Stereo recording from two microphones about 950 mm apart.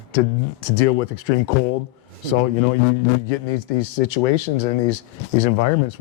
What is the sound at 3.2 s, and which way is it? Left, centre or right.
Speech, left.